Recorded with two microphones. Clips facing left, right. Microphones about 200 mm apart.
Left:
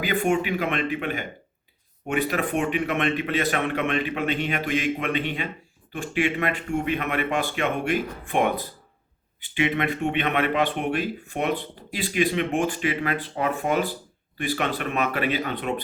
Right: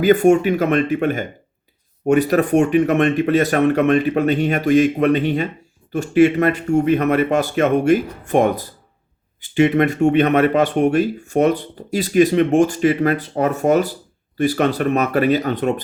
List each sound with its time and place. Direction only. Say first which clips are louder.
0.0 s speech: right 11 dB; 45° right (ahead or behind)